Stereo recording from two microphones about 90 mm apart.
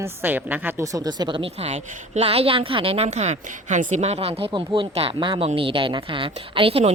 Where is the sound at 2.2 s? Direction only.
90° right.